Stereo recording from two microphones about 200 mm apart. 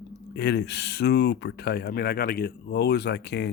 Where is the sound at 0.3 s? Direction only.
60° left (ahead or behind).